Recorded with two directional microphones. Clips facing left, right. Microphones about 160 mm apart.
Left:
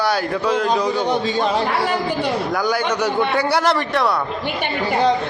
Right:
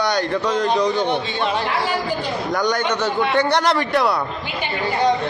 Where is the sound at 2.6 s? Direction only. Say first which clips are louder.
Right 2 dB; 5° left (ahead or behind).